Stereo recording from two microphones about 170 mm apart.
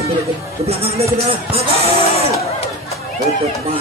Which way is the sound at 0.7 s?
35° right (ahead or behind).